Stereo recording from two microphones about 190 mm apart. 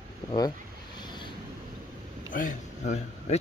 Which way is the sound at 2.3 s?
45° left (ahead or behind).